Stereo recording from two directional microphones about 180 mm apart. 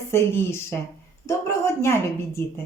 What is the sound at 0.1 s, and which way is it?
A woman's voice, 15° left (ahead or behind).